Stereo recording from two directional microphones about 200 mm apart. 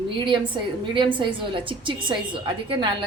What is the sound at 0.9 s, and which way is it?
A woman's voice, 25° right (ahead or behind).